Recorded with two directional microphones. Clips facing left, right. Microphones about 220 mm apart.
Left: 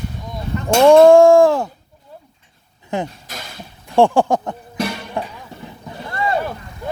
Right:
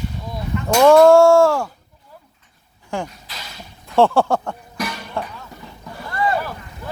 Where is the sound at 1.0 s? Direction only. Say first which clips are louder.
Left 2 dB; 15° left (ahead or behind).